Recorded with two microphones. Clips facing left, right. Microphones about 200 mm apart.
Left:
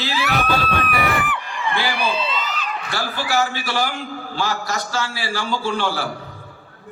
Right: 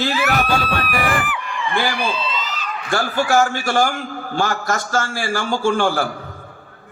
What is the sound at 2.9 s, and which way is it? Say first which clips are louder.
A man's voice: right 6 dB; 50° right (ahead or behind).